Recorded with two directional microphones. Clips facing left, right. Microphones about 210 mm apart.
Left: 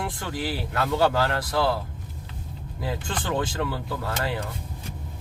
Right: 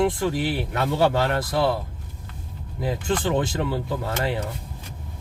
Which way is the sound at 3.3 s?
25° right (ahead or behind).